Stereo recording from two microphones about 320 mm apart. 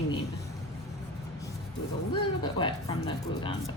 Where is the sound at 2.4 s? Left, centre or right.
Centre.